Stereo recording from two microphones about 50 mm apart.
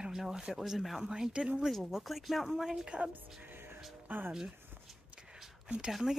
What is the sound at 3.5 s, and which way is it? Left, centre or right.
Music, right.